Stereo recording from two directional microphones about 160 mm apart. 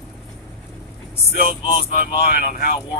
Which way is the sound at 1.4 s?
60° right (ahead or behind).